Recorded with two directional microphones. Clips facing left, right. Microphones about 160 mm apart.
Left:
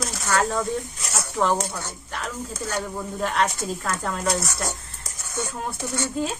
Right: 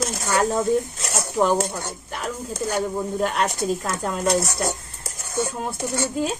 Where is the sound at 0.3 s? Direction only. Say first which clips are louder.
Right 3 dB; 15° right (ahead or behind).